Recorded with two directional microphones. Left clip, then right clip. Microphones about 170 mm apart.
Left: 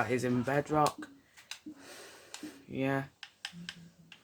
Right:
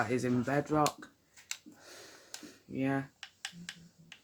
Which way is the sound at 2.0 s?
15° left (ahead or behind).